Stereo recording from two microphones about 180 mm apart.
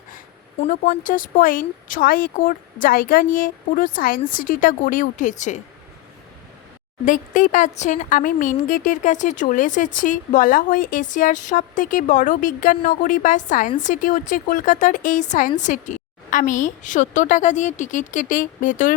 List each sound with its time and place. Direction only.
0.7 s a woman's voice: 50° left (ahead or behind)
7.0 s a woman's voice: 45° left (ahead or behind)